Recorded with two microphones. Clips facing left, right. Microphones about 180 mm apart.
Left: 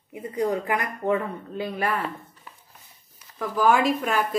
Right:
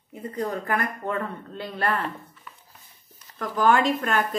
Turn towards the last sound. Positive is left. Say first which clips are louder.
# even
turn(degrees=5)  # may be behind; listen again after turning